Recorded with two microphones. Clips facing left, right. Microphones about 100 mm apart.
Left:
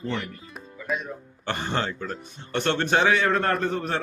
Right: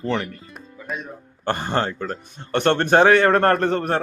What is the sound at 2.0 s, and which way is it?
A man's voice, 60° right (ahead or behind).